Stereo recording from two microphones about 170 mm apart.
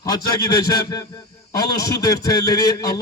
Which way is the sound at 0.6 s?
20° left (ahead or behind).